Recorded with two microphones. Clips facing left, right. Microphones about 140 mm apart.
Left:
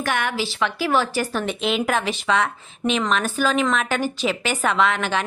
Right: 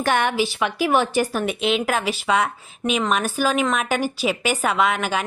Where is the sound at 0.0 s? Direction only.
30° right (ahead or behind).